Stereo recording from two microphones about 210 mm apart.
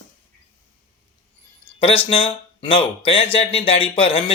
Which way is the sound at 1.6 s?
25° left (ahead or behind).